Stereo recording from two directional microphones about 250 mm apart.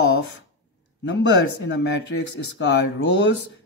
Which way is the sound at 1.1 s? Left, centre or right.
Left.